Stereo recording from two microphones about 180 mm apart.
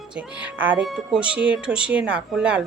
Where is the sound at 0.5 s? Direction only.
10° right (ahead or behind).